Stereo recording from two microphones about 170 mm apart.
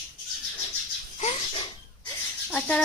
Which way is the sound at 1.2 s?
35° left (ahead or behind).